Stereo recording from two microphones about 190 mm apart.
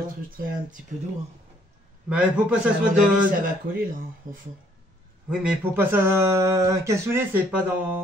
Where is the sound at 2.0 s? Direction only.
5° right (ahead or behind).